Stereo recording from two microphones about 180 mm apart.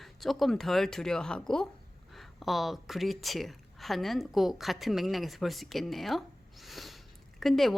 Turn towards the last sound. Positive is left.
turn(degrees=0)  # may be behind; listen again after turning